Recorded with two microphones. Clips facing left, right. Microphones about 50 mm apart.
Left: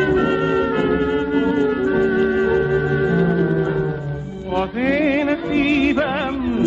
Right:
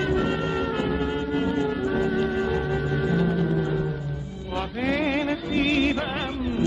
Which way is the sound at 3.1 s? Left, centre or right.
Centre.